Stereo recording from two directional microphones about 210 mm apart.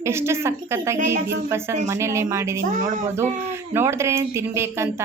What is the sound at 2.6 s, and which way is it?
Speech, 40° right (ahead or behind).